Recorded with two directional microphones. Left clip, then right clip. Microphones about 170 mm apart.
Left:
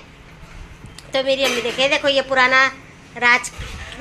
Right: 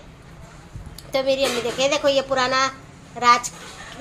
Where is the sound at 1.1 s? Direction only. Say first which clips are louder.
Left 2 dB; 10° right (ahead or behind).